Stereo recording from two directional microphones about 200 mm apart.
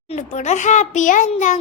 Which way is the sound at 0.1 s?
35° left (ahead or behind).